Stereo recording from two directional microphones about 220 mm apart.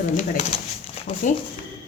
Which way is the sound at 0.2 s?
35° left (ahead or behind).